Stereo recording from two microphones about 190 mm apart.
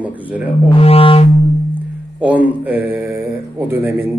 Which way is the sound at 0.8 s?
30° left (ahead or behind).